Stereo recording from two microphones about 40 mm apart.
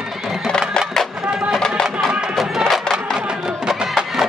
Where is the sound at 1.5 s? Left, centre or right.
Centre.